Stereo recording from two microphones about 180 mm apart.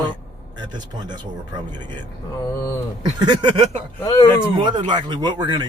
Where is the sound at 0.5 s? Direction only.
25° right (ahead or behind).